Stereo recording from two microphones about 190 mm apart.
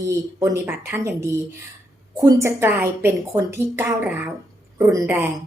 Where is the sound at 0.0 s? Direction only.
15° right (ahead or behind).